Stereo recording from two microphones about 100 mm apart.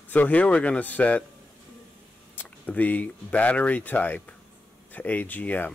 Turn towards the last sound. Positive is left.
turn(degrees=15)  # may be behind; listen again after turning